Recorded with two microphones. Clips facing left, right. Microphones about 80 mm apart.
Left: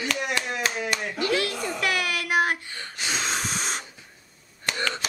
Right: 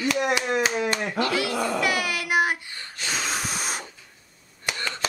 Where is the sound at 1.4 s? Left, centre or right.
Right.